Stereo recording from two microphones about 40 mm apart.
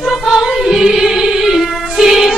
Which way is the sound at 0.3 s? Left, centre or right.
Centre.